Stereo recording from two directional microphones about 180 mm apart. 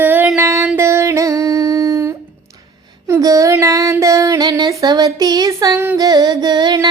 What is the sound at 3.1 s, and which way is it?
Child singing, 15° right (ahead or behind).